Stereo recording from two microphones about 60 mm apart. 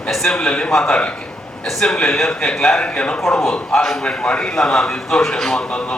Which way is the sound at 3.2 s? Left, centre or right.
Centre.